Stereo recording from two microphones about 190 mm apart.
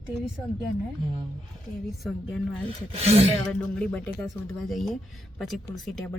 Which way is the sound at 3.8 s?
10° left (ahead or behind).